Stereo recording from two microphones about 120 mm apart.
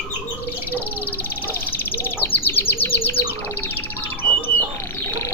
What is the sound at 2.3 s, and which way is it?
Bird, 20° left (ahead or behind).